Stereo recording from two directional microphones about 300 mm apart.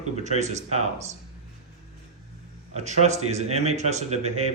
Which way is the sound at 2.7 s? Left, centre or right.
Right.